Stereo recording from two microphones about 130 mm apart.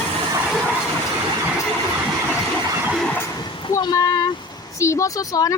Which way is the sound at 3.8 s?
30° left (ahead or behind).